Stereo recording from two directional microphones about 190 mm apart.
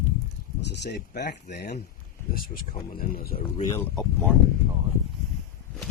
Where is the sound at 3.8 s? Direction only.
5° left (ahead or behind).